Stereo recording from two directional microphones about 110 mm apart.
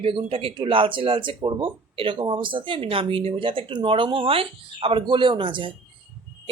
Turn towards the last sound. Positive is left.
turn(degrees=-50)  # may be behind; listen again after turning